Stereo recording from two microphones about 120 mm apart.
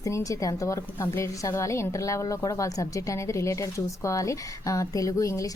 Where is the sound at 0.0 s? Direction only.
30° left (ahead or behind).